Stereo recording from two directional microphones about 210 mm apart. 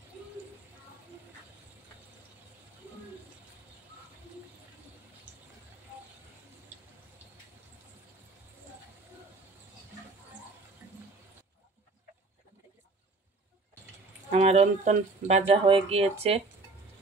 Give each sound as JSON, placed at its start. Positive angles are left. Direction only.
{"t": 14.3, "sound": "speech", "side_deg": -30}